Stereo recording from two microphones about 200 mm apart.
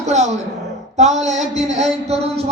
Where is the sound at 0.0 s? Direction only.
35° right (ahead or behind).